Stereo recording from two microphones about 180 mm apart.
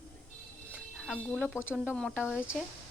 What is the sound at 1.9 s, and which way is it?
Speech, 10° left (ahead or behind).